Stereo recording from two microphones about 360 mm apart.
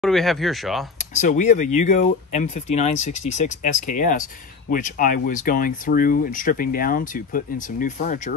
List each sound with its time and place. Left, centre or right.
0.0 s speech: centre
0.9 s speech: centre
2.9 s speech: left
3.3 s speech: centre